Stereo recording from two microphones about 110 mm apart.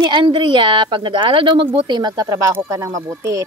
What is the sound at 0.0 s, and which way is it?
Speech, 45° right (ahead or behind).